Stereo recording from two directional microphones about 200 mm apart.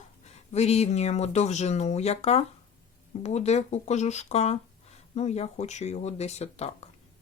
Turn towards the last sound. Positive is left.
turn(degrees=30)  # may be behind; listen again after turning